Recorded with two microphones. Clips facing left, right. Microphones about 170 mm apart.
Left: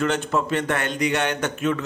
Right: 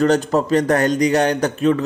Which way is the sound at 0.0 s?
35° right (ahead or behind).